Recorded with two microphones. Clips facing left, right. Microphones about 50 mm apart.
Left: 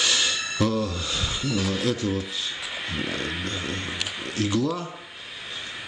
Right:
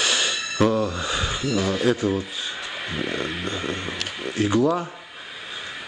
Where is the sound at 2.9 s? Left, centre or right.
Centre.